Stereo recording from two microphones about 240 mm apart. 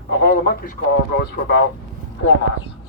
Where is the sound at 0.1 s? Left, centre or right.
Left.